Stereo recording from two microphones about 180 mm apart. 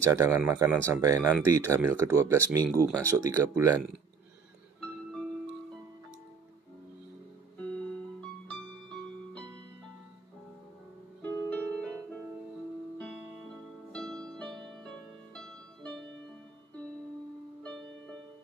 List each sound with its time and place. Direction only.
0.0 s speech: 15° right (ahead or behind)
7.7 s music: 5° left (ahead or behind)
11.2 s harp: 10° left (ahead or behind)
12.9 s music: 5° left (ahead or behind)